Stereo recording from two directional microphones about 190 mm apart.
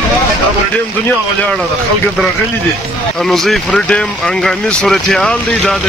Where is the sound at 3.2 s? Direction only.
Centre (ahead or behind).